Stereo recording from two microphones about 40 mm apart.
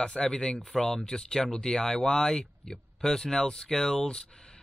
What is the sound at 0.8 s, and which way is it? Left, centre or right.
Speech, centre.